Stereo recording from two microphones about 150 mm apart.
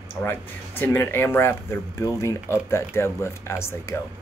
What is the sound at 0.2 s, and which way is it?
Speech, 15° left (ahead or behind).